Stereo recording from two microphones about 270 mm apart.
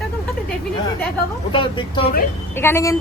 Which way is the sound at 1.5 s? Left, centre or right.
Centre.